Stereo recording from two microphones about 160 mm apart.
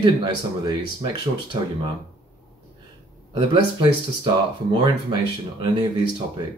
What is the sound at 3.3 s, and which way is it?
Speech, 30° right (ahead or behind).